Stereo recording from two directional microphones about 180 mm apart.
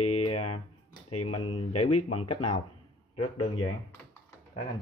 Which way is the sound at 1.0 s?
30° left (ahead or behind).